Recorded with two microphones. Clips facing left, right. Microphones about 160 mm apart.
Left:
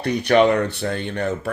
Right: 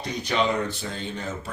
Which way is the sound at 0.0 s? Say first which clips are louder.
Left 9 dB; 65° left (ahead or behind).